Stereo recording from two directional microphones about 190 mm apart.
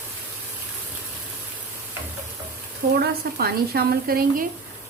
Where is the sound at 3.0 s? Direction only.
55° right (ahead or behind).